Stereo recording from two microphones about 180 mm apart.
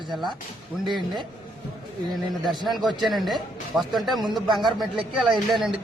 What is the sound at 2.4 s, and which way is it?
Speech, 25° right (ahead or behind).